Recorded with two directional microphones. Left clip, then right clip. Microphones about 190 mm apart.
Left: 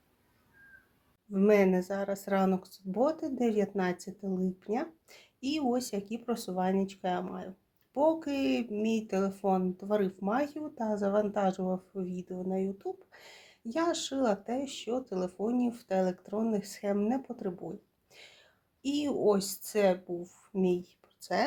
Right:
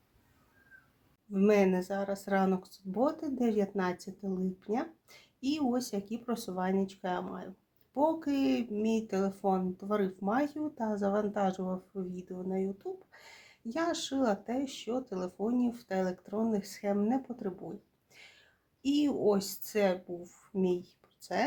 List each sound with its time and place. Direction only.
1.3 s speech: 20° left (ahead or behind)
18.1 s a sound: 25° left (ahead or behind)
18.8 s speech: 25° left (ahead or behind)